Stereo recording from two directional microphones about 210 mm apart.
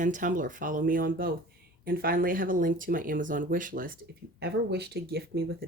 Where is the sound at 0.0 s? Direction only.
40° right (ahead or behind).